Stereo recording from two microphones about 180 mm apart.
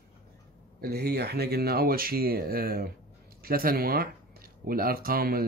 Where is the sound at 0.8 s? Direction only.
65° right (ahead or behind).